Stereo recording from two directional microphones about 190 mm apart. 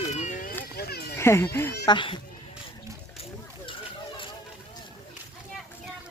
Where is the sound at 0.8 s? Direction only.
55° left (ahead or behind).